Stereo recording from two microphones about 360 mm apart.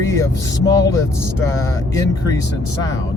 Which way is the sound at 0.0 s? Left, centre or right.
Centre.